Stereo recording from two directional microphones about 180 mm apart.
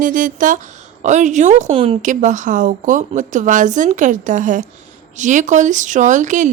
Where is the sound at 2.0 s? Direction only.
45° right (ahead or behind).